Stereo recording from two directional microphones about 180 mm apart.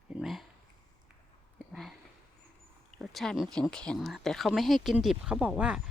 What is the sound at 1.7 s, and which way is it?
Speech, centre (ahead or behind).